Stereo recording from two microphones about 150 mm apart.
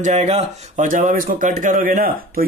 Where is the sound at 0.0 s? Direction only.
50° right (ahead or behind).